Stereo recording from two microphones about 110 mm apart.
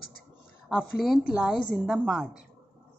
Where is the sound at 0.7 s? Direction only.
5° right (ahead or behind).